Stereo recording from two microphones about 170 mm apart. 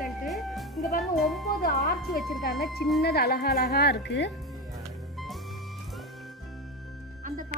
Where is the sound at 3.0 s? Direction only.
70° left (ahead or behind); by 4.3 s 85° left.